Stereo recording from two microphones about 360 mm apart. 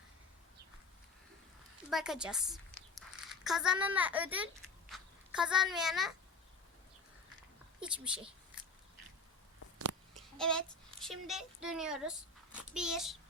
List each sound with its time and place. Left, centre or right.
1.9 s a woman's voice: centre
7.8 s speech: centre
9.7 s a sound: right
10.3 s a child's voice: centre